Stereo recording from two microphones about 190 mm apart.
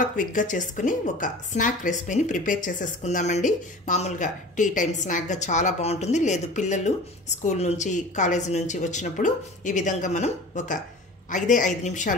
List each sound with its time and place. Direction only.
0.0 s a woman's voice: 45° left (ahead or behind)